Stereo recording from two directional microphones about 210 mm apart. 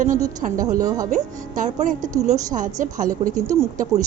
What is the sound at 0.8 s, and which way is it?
Speech, 15° right (ahead or behind).